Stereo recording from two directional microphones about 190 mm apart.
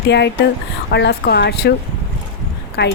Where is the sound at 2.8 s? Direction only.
60° left (ahead or behind).